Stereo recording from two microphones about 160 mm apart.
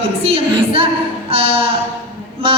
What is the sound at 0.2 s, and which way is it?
A woman's voice, 35° right (ahead or behind).